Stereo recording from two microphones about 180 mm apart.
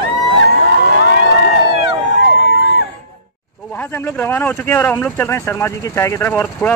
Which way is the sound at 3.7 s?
10° left (ahead or behind).